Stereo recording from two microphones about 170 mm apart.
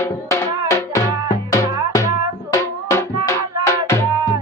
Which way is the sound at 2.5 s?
15° left (ahead or behind).